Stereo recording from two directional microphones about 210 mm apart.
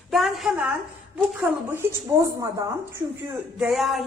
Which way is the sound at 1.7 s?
15° right (ahead or behind).